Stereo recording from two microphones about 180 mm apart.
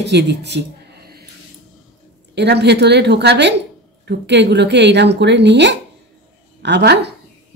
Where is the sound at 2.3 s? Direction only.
65° right (ahead or behind).